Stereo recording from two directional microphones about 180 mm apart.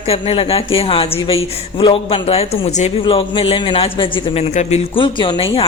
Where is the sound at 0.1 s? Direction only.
30° left (ahead or behind).